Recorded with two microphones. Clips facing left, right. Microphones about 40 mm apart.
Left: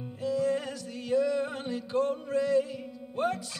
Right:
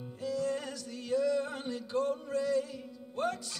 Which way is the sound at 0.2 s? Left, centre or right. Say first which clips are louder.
Left 5 dB; centre.